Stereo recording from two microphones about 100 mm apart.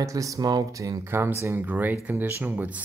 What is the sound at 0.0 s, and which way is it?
Speech, 35° right (ahead or behind).